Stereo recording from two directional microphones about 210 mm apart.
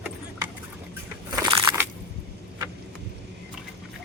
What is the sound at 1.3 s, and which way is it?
Crushing, 20° right (ahead or behind).